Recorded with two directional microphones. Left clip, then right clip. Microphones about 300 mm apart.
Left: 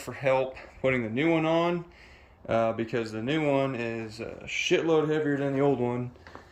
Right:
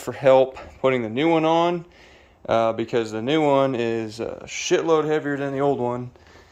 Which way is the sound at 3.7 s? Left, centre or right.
Right.